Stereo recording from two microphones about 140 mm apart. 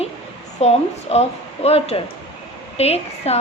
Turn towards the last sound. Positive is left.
turn(degrees=45)  # may be behind; listen again after turning